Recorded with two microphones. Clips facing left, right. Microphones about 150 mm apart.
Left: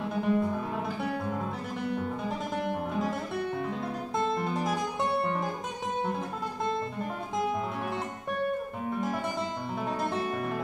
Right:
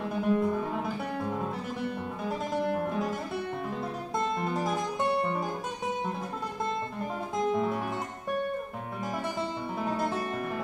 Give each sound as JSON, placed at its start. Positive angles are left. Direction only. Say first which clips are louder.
{"t": 0.2, "sound": "music", "louder": "right 1 dB", "side_deg": 0}
{"t": 2.9, "sound": "music", "louder": "even", "side_deg": 0}
{"t": 4.4, "sound": "music", "louder": "even", "side_deg": 0}
{"t": 7.3, "sound": "music", "louder": "right 3 dB", "side_deg": 0}
{"t": 9.8, "sound": "music", "louder": "even", "side_deg": 0}